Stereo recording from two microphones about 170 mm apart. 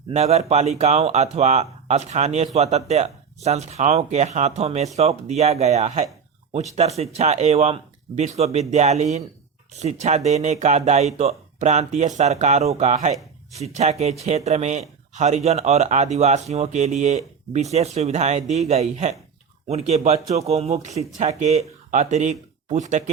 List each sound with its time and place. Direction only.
0.1 s speech: 40° right (ahead or behind)